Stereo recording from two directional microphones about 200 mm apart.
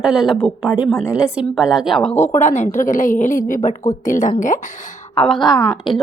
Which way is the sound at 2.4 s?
35° left (ahead or behind).